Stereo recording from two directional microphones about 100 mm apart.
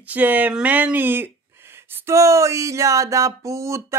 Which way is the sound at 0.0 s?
15° right (ahead or behind).